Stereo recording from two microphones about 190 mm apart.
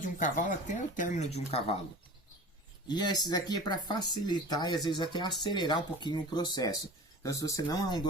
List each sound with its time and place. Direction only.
0.0 s speech: 45° left (ahead or behind)
2.8 s speech: 20° left (ahead or behind)